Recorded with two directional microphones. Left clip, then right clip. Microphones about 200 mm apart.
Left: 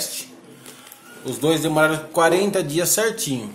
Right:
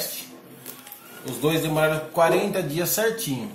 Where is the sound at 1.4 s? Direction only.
55° left (ahead or behind).